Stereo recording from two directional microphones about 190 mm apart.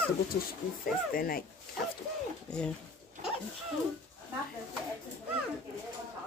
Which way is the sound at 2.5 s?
5° left (ahead or behind).